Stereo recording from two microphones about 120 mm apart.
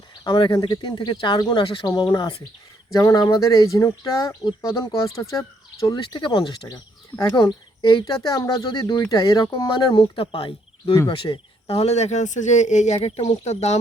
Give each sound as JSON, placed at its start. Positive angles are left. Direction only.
{"t": 0.3, "sound": "speech", "side_deg": 35}
{"t": 2.9, "sound": "speech", "side_deg": 25}
{"t": 6.0, "sound": "speech", "side_deg": 45}
{"t": 13.0, "sound": "speech", "side_deg": 60}